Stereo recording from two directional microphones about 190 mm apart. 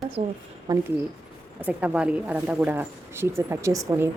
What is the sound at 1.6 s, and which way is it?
Speech, 10° right (ahead or behind).